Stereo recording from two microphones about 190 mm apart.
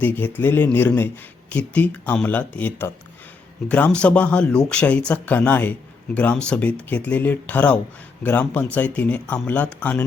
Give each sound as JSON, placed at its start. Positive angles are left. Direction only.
{"t": 0.0, "sound": "speech", "side_deg": 10}